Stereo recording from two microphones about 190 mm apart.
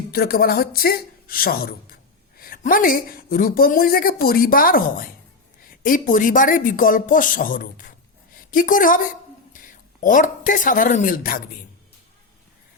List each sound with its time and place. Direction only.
0.1 s a woman's voice: 55° left (ahead or behind)